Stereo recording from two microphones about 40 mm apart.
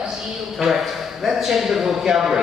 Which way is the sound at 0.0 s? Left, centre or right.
Centre.